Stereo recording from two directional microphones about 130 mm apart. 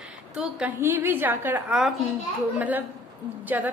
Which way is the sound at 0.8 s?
15° right (ahead or behind).